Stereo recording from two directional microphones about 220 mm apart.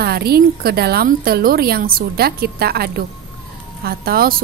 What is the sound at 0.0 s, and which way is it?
A woman's voice, 45° right (ahead or behind).